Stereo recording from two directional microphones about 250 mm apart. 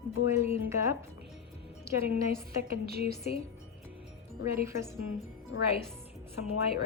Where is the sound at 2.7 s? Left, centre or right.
Right.